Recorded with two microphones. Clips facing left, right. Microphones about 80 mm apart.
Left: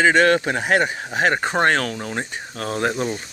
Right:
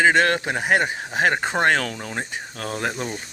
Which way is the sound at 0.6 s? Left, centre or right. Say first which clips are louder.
Even; centre.